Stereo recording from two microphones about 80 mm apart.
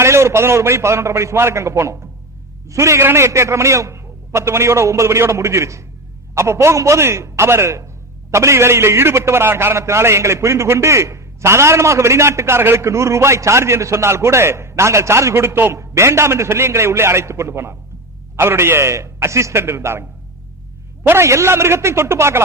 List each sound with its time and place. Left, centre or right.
0.0 s a man's voice: right
21.1 s a man's voice: right